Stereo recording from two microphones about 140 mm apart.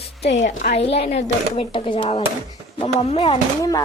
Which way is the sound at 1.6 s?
40° left (ahead or behind).